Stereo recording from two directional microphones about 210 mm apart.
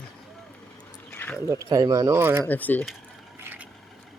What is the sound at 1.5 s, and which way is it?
Speech, 15° right (ahead or behind).